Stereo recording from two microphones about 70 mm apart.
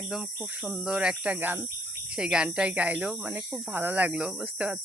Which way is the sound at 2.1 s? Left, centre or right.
Centre.